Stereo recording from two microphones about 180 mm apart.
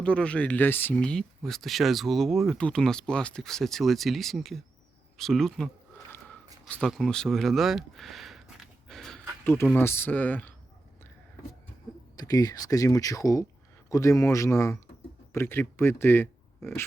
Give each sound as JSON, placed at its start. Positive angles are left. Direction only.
{"t": 0.0, "sound": "speech", "side_deg": 5}
{"t": 5.1, "sound": "a sound", "side_deg": 0}
{"t": 6.8, "sound": "speech", "side_deg": 5}
{"t": 12.1, "sound": "speech", "side_deg": 20}